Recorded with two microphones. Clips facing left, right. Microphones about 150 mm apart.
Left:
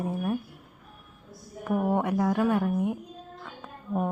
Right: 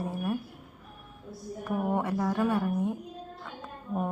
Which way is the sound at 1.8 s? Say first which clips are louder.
Left 3 dB; 15° left (ahead or behind).